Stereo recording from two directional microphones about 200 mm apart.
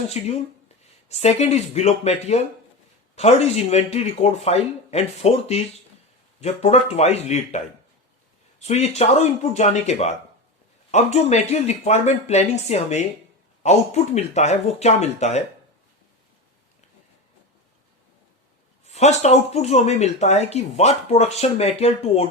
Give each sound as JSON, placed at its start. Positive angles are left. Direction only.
{"t": 0.2, "sound": "speech", "side_deg": 35}
{"t": 18.9, "sound": "speech", "side_deg": 35}